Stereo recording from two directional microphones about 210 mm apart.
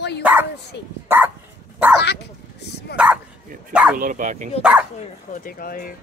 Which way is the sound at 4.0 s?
40° right (ahead or behind).